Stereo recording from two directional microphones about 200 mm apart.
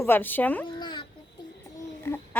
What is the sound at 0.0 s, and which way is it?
Speech, 10° left (ahead or behind).